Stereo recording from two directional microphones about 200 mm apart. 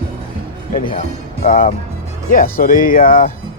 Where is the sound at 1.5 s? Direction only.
40° left (ahead or behind).